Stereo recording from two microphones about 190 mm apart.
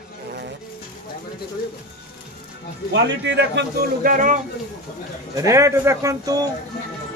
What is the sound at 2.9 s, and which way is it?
A man's voice, 65° right (ahead or behind).